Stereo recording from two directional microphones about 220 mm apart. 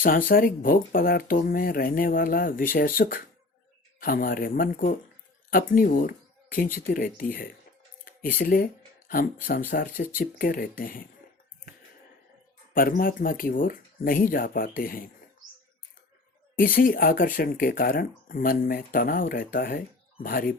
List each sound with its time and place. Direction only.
0.0 s speech: 40° left (ahead or behind)
12.7 s speech: 40° left (ahead or behind)
16.6 s speech: 40° left (ahead or behind)